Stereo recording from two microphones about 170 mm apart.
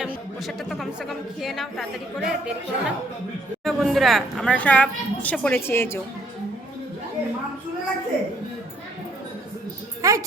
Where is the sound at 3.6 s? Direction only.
Centre (ahead or behind).